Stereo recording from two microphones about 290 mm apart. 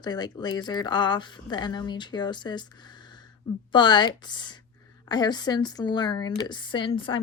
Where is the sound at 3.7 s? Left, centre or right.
Centre.